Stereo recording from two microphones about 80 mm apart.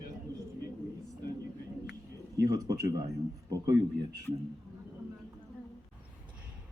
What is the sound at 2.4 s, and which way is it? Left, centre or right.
Speech, right.